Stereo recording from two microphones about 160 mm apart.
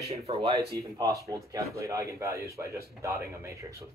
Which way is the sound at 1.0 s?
20° right (ahead or behind).